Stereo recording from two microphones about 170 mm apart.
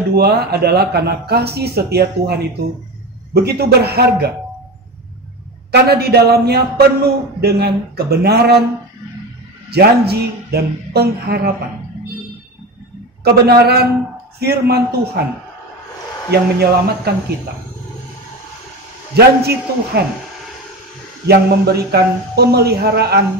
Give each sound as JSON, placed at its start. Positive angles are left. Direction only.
{"t": 0.1, "sound": "a man's voice", "side_deg": -70}
{"t": 3.4, "sound": "a man's voice", "side_deg": -70}
{"t": 5.7, "sound": "a man's voice", "side_deg": -70}
{"t": 9.7, "sound": "a man's voice", "side_deg": -70}
{"t": 13.2, "sound": "a man's voice", "side_deg": -65}
{"t": 16.3, "sound": "a man's voice", "side_deg": -70}
{"t": 19.1, "sound": "a man's voice", "side_deg": -70}
{"t": 21.3, "sound": "a man's voice", "side_deg": -70}